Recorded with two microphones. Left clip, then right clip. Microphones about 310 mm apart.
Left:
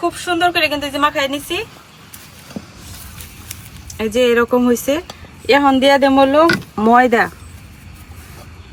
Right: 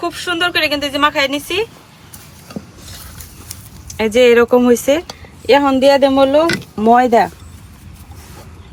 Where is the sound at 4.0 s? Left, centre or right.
Centre.